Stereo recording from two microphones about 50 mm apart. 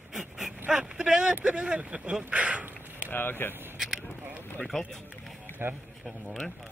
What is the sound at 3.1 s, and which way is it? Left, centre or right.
Speech, left.